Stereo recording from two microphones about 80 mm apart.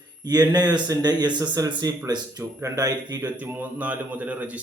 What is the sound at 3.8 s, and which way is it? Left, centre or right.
Speech, centre.